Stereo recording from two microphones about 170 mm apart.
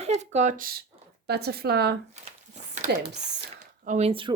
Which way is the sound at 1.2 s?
70° right (ahead or behind).